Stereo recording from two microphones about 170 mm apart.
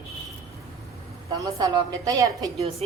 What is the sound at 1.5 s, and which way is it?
A man's voice, 20° right (ahead or behind).